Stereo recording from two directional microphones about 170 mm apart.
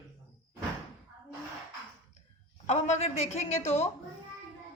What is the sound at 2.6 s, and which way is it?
A woman's voice, 45° left (ahead or behind).